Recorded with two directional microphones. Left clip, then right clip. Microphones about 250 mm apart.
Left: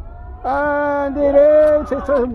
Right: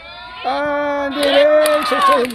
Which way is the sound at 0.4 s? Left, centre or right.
Centre.